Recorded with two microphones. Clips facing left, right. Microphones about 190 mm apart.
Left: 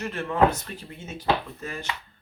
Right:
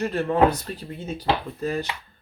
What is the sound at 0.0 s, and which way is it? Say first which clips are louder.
Speech: right 3 dB; 35° right (ahead or behind).